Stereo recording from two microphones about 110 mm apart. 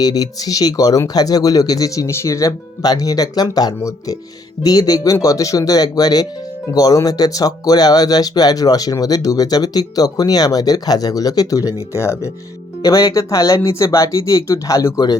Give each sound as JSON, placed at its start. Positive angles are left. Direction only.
{"t": 0.0, "sound": "speech", "side_deg": 35}